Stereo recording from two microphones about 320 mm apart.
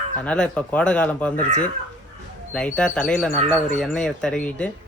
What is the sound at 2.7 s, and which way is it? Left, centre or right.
Speech, centre.